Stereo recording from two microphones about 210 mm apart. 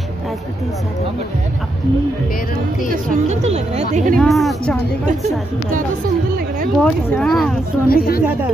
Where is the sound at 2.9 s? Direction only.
35° right (ahead or behind).